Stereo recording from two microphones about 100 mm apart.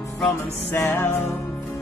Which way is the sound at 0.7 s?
25° left (ahead or behind).